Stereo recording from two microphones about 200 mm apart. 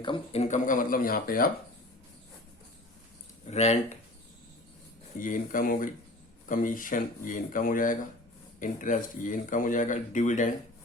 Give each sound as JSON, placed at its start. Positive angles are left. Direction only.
{"t": 0.0, "sound": "speech", "side_deg": 30}
{"t": 3.4, "sound": "speech", "side_deg": 35}
{"t": 5.2, "sound": "speech", "side_deg": 40}